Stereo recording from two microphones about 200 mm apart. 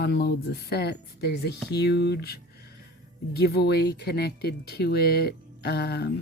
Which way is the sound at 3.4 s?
55° left (ahead or behind).